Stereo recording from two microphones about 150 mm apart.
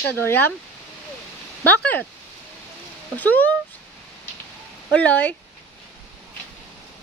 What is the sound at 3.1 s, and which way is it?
Speech, 10° left (ahead or behind).